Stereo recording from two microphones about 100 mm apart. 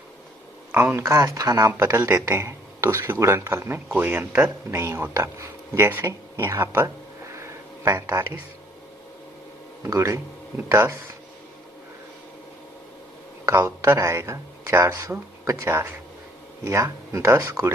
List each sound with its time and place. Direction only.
0.7 s speech: 25° right (ahead or behind)
7.3 s a sound: 25° right (ahead or behind)
9.8 s speech: 30° right (ahead or behind)
13.6 s speech: 25° right (ahead or behind)